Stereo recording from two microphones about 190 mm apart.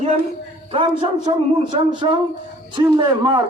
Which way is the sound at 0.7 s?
25° right (ahead or behind).